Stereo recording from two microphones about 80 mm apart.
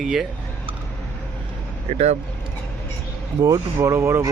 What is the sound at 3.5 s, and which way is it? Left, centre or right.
Speech, right.